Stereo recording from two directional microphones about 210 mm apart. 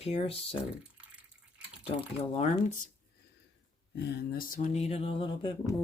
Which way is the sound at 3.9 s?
50° left (ahead or behind).